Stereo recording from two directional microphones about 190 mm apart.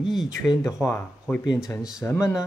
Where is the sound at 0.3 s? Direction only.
15° left (ahead or behind).